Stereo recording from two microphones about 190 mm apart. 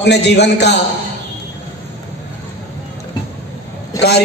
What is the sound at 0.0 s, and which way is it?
Speech, 60° left (ahead or behind).